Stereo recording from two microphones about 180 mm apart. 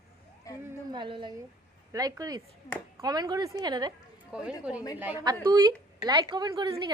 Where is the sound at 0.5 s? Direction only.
20° left (ahead or behind).